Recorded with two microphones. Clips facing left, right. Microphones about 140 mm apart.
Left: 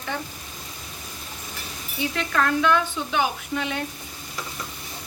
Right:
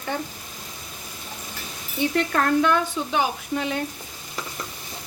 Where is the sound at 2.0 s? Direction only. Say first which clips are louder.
Right 4 dB; 55° right (ahead or behind).